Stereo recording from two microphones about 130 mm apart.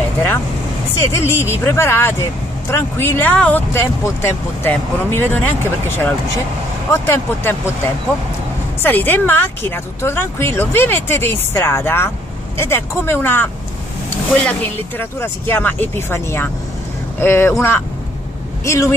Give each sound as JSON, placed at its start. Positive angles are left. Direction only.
{"t": 0.9, "sound": "speech", "side_deg": 20}
{"t": 8.8, "sound": "speech", "side_deg": 15}